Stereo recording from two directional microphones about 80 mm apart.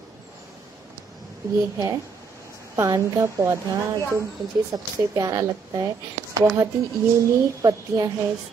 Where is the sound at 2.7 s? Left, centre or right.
Right.